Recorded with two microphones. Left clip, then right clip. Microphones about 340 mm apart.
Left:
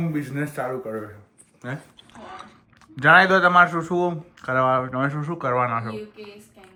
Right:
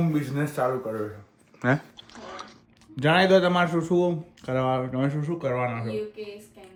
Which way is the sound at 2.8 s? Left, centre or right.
Centre.